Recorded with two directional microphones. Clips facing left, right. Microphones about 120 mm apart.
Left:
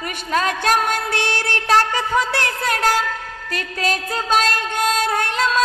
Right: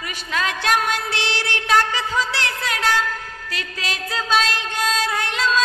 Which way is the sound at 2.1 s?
55° left (ahead or behind).